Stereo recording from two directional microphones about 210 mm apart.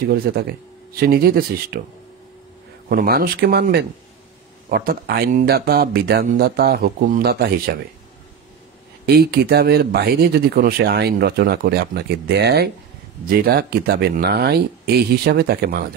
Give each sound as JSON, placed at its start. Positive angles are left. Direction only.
{"t": 0.1, "sound": "speech", "side_deg": -45}
{"t": 2.9, "sound": "speech", "side_deg": -45}
{"t": 9.0, "sound": "speech", "side_deg": -45}